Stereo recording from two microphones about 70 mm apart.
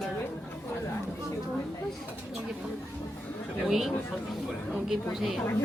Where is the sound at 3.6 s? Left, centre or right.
Centre.